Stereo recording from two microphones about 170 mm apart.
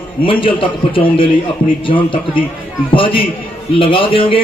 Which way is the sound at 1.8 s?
30° left (ahead or behind).